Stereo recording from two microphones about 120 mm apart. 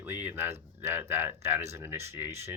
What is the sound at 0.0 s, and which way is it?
Speech, 15° right (ahead or behind).